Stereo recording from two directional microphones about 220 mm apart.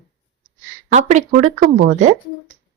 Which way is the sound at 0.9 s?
30° right (ahead or behind).